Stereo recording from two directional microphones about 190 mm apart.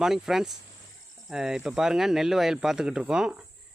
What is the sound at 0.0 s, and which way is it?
Speech, centre (ahead or behind).